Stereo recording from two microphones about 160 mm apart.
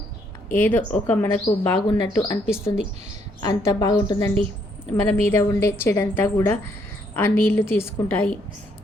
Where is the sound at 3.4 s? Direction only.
20° left (ahead or behind).